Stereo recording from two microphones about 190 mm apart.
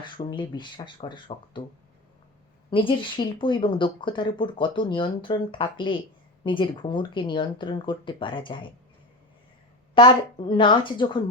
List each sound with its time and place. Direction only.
0.3 s speech: 25° left (ahead or behind)
2.6 s speech: 25° left (ahead or behind)
9.9 s speech: 25° left (ahead or behind)